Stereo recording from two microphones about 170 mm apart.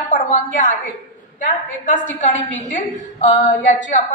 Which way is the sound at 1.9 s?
50° left (ahead or behind).